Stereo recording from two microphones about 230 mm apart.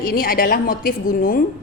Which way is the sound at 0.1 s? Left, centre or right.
Left.